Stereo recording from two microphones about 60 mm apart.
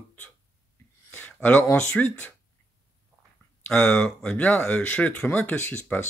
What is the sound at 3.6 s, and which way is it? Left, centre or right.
Speech, centre.